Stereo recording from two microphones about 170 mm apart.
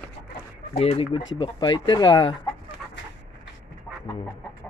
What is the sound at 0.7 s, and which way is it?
Speech, 35° left (ahead or behind).